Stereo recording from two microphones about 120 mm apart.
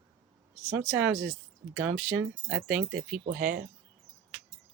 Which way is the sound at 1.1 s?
25° right (ahead or behind).